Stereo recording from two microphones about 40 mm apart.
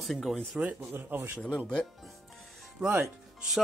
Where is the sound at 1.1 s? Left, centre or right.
Right.